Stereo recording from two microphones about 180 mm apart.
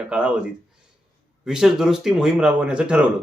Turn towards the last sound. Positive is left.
turn(degrees=-5)  # may be behind; listen again after turning